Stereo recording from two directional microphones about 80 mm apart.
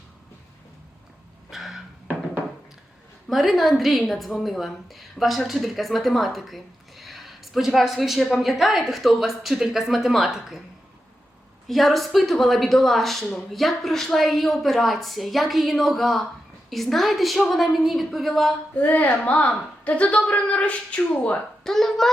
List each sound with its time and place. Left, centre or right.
1.5 s a sound: centre
3.2 s a woman's voice: centre
11.7 s a woman's voice: centre
18.8 s a woman's voice: centre
21.6 s a woman's voice: centre